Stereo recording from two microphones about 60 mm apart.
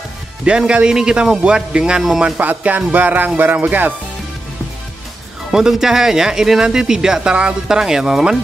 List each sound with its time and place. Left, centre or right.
0.5 s speech: centre
2.3 s speech: right
3.3 s music: right
5.5 s speech: centre